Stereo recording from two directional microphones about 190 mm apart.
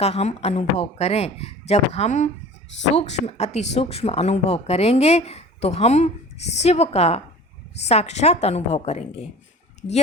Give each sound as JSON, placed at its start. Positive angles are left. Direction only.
{"t": 0.0, "sound": "speech", "side_deg": 35}